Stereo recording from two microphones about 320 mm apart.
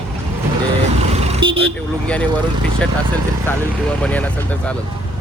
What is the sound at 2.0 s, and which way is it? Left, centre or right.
Speech, centre.